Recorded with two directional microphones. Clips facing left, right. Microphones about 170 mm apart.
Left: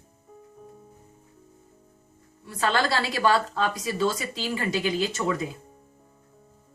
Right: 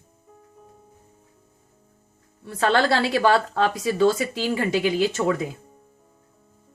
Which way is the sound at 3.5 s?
60° right (ahead or behind).